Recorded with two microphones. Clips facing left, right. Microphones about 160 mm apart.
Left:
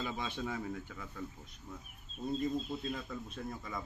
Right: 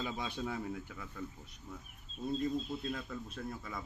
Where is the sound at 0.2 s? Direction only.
10° right (ahead or behind).